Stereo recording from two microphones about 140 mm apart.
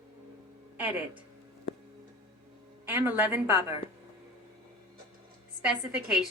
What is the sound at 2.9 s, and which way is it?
Speech, 10° right (ahead or behind).